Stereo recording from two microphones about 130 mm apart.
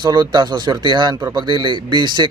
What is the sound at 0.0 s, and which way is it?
Speech, 35° right (ahead or behind).